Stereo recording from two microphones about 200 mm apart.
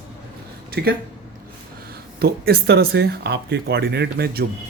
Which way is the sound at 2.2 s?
50° right (ahead or behind).